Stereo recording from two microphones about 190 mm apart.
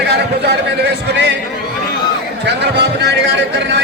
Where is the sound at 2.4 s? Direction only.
65° right (ahead or behind).